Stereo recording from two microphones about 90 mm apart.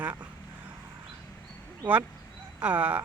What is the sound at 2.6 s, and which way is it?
Speech, 20° right (ahead or behind).